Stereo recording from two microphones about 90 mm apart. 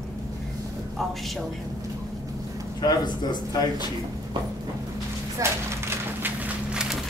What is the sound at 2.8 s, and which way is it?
Speech, 50° left (ahead or behind).